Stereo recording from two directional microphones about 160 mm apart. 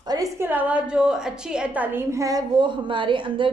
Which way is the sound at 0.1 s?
20° right (ahead or behind).